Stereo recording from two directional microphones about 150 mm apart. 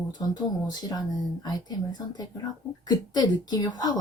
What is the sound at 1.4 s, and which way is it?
Speech, 25° left (ahead or behind).